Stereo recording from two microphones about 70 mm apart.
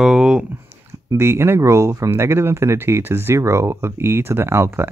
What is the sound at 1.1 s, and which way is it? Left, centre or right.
Speech, right.